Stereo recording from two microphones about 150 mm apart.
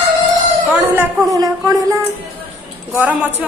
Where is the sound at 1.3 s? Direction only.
25° right (ahead or behind).